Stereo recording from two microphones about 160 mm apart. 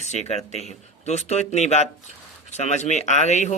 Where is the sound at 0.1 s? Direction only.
45° left (ahead or behind).